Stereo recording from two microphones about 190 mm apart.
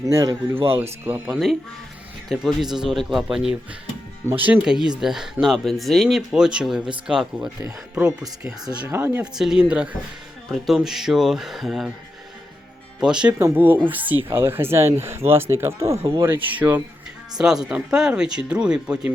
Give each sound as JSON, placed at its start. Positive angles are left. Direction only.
{"t": 0.0, "sound": "speech", "side_deg": -15}
{"t": 4.3, "sound": "speech", "side_deg": -10}
{"t": 8.8, "sound": "speech", "side_deg": -10}
{"t": 13.0, "sound": "speech", "side_deg": -5}